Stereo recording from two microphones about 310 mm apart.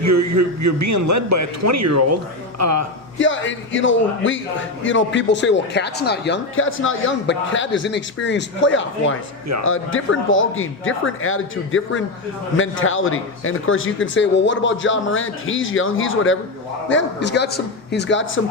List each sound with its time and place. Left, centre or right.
0.0 s a man's voice: right
3.2 s speech: left